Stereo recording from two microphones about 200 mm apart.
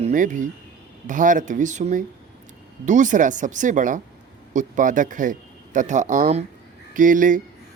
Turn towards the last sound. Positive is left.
turn(degrees=-40)  # may be behind; listen again after turning